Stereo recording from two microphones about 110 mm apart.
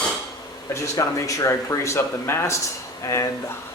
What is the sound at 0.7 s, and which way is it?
Speech, 30° left (ahead or behind).